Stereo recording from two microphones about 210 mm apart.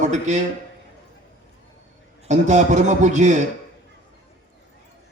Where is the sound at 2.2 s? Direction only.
35° right (ahead or behind).